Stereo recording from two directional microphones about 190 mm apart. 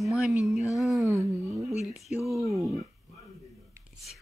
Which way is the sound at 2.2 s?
Centre (ahead or behind).